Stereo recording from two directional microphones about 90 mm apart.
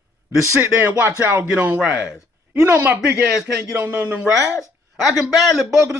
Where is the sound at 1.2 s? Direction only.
20° right (ahead or behind).